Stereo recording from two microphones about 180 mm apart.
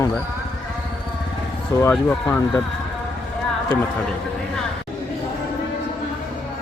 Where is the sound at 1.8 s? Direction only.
10° left (ahead or behind).